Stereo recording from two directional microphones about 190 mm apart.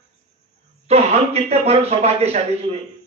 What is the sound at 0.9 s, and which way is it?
A man's voice, 35° right (ahead or behind).